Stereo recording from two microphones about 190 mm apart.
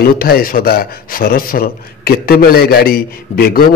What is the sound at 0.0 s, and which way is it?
A man's voice, 50° left (ahead or behind).